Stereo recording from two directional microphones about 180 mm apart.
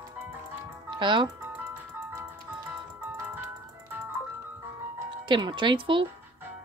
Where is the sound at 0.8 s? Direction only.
25° right (ahead or behind).